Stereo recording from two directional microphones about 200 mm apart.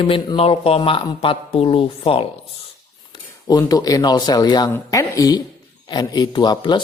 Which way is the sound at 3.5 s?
20° left (ahead or behind).